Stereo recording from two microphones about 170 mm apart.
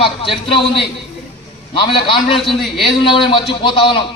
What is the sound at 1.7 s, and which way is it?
A man's voice, 30° left (ahead or behind).